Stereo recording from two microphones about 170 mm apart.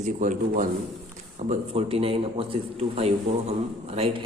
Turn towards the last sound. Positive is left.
turn(degrees=-35)  # may be behind; listen again after turning